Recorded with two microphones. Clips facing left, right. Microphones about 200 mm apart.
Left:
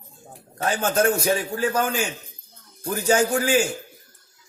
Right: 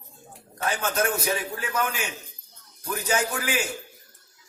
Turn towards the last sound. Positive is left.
turn(degrees=30)  # may be behind; listen again after turning